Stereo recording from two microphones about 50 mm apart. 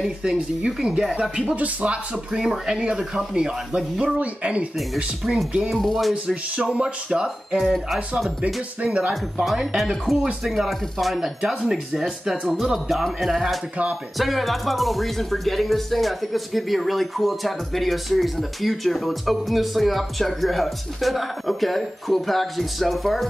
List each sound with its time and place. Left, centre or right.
0.2 s speech: centre
1.5 s speech: right
2.3 s speech: centre; by 4.6 s right
4.7 s speech: centre
5.7 s speech: centre
6.2 s speech: right
7.5 s speech: centre
8.8 s speech: right
9.1 s speech: centre